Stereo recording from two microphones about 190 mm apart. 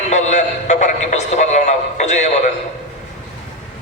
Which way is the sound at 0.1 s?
40° left (ahead or behind).